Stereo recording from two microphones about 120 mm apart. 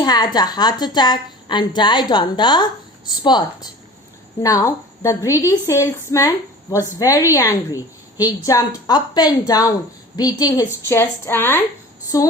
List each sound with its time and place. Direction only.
0.0 s a woman's voice: 35° left (ahead or behind)
4.4 s a woman's voice: 25° left (ahead or behind)
10.8 s a woman's voice: 20° left (ahead or behind)
12.1 s a woman's voice: 30° left (ahead or behind)